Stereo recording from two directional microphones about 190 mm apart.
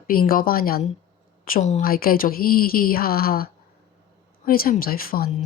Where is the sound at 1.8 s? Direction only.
50° left (ahead or behind).